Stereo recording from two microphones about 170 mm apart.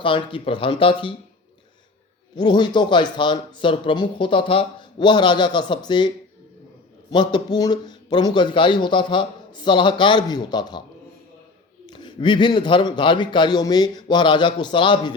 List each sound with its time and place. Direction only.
0.0 s speech: 30° left (ahead or behind)
2.3 s a man's voice: 25° left (ahead or behind)
7.1 s a man's voice: 25° left (ahead or behind)
11.9 s a man's voice: 25° left (ahead or behind)